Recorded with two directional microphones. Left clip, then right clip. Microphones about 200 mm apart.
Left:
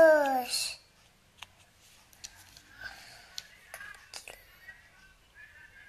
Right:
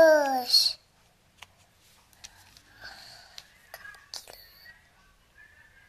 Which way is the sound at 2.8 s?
5° right (ahead or behind).